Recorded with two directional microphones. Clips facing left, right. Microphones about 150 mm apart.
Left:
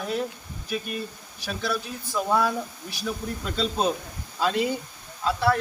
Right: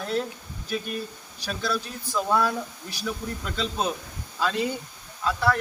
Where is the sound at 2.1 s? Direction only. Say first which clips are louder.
Even; 5° left (ahead or behind).